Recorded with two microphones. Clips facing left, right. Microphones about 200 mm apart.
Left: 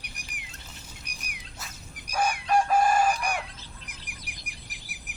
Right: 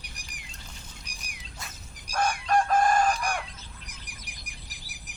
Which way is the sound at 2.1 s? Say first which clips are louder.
Even; 10° left (ahead or behind).